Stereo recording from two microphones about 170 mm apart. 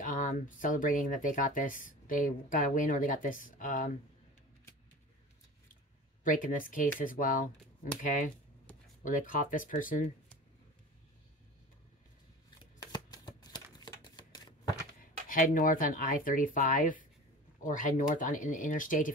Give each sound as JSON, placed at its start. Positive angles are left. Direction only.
{"t": 0.0, "sound": "speech", "side_deg": 50}
{"t": 6.2, "sound": "speech", "side_deg": 50}
{"t": 9.0, "sound": "speech", "side_deg": 50}
{"t": 12.8, "sound": "shuffling cards", "side_deg": 25}
{"t": 15.0, "sound": "speech", "side_deg": 55}